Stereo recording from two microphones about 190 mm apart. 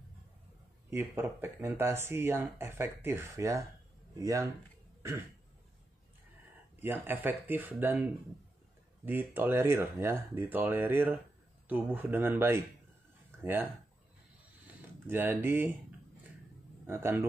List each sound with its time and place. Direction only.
0.8 s speech: 10° right (ahead or behind)
6.8 s speech: 10° right (ahead or behind)
14.7 s speech: 10° right (ahead or behind)
16.8 s a man's voice: 10° right (ahead or behind)